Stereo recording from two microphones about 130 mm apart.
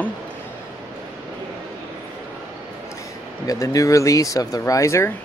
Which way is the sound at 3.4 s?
25° left (ahead or behind).